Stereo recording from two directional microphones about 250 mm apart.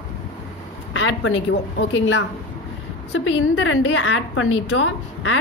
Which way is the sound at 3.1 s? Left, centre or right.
Left.